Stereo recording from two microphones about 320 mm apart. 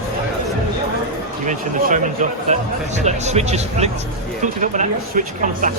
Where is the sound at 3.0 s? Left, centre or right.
Right.